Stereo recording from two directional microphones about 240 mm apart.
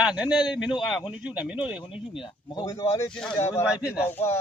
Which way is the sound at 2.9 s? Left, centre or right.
Centre.